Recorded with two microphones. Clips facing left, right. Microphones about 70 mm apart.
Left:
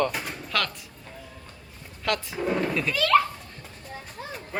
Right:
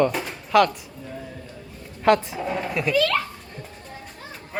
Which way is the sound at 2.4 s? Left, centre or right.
Centre.